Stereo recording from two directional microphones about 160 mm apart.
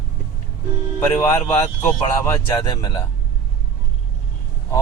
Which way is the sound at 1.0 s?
20° left (ahead or behind).